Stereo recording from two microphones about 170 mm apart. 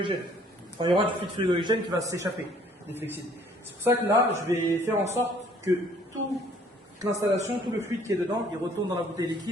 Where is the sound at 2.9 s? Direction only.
10° right (ahead or behind).